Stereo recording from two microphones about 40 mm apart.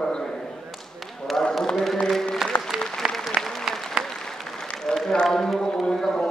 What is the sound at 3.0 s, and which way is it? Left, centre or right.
Applause, right.